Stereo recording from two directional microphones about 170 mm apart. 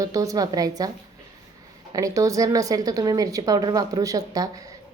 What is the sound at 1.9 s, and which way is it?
A woman's voice, 20° right (ahead or behind).